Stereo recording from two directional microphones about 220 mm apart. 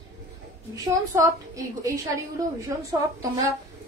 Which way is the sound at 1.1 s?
15° right (ahead or behind).